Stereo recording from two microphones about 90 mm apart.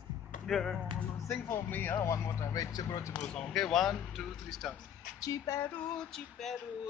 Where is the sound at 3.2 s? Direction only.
5° left (ahead or behind).